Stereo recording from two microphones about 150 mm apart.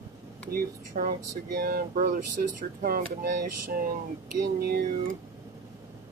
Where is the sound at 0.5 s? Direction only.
75° right (ahead or behind).